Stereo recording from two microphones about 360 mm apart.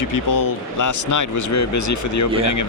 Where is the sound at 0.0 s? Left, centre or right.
Left.